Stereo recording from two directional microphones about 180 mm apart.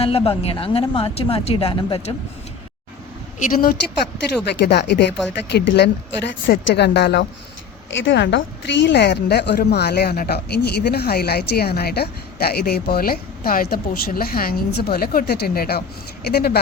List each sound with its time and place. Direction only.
0.0 s speech: 30° left (ahead or behind)
3.3 s a woman's voice: 50° left (ahead or behind)
4.4 s speech: 65° left (ahead or behind)
7.9 s a woman's voice: 90° left; by 16.6 s 60° left (ahead or behind)